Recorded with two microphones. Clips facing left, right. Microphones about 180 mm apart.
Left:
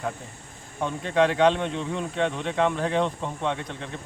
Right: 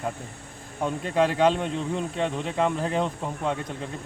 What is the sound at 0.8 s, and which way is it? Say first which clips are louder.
A man's voice: left 1 dB; 5° right (ahead or behind).